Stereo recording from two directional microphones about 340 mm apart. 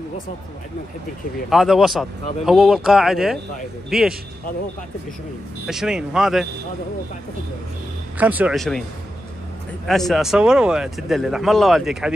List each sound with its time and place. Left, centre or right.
1.5 s speech: centre
5.7 s speech: centre
8.2 s speech: centre
9.8 s speech: centre